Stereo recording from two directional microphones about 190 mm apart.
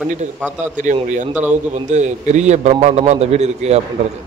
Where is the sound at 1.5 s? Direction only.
40° right (ahead or behind).